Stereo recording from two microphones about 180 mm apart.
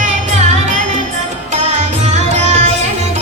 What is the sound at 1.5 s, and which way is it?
Music, 40° right (ahead or behind).